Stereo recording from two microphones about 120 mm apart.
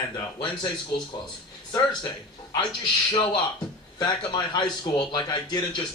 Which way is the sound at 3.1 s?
45° left (ahead or behind).